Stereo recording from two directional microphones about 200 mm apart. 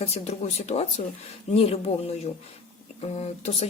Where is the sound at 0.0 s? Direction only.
30° left (ahead or behind).